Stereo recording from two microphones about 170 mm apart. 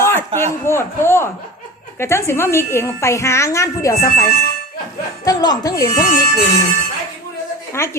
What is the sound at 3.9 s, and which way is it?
Speech, 60° left (ahead or behind).